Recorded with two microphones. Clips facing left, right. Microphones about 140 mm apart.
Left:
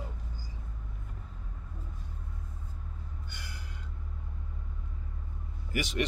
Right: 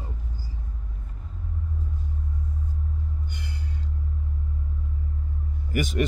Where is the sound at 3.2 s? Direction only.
20° right (ahead or behind).